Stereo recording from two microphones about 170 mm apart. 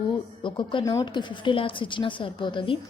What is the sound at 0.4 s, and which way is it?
A woman's voice, 30° left (ahead or behind).